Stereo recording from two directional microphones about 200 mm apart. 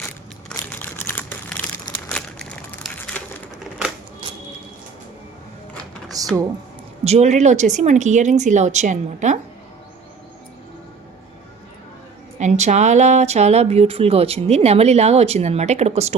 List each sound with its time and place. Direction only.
0.0 s crumpling: 5° left (ahead or behind)
5.7 s a sound: 5° left (ahead or behind)
7.0 s speech: 35° right (ahead or behind)
12.4 s speech: 35° right (ahead or behind)